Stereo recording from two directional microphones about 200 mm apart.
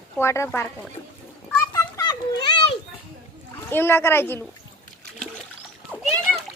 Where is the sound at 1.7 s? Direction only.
20° left (ahead or behind).